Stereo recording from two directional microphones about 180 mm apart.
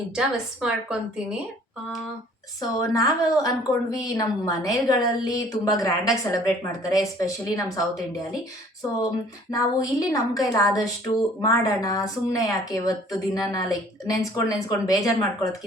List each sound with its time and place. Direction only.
0.2 s a woman's voice: 5° right (ahead or behind)
2.6 s a woman's voice: 20° left (ahead or behind)
9.5 s a woman's voice: 20° left (ahead or behind)